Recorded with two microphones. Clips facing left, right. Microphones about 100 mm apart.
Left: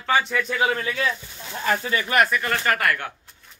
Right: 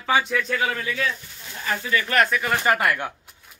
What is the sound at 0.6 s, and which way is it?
Speech, 30° left (ahead or behind).